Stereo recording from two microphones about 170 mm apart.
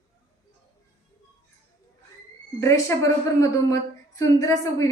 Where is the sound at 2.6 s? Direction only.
15° left (ahead or behind).